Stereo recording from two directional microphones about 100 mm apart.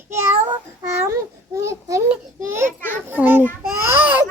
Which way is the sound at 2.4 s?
25° right (ahead or behind).